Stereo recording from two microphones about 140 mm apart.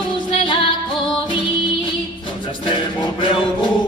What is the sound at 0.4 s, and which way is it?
Music, 40° left (ahead or behind).